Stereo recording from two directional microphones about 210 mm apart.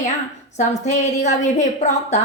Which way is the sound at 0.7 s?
35° left (ahead or behind).